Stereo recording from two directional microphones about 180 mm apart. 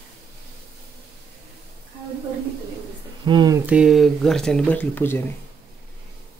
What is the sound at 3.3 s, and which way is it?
Speech, 20° right (ahead or behind).